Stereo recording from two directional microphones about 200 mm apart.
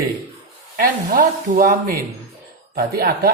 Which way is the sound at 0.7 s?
45° right (ahead or behind).